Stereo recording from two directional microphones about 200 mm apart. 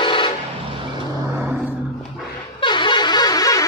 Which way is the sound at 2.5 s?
25° left (ahead or behind).